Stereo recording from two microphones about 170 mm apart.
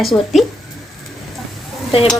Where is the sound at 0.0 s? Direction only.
Centre (ahead or behind).